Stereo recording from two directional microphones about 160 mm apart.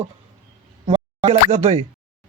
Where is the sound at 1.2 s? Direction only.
40° right (ahead or behind).